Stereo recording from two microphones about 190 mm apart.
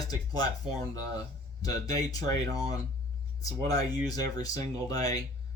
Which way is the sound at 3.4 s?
20° left (ahead or behind).